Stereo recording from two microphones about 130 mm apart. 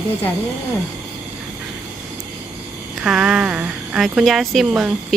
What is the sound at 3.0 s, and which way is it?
Speech, 5° right (ahead or behind).